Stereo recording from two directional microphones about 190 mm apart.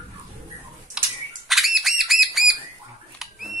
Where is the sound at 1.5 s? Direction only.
Centre (ahead or behind).